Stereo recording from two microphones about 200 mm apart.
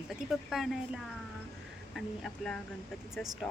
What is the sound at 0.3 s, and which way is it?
Speech, centre (ahead or behind).